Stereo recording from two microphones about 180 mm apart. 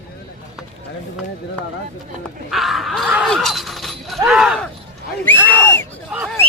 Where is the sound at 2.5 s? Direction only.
Centre (ahead or behind).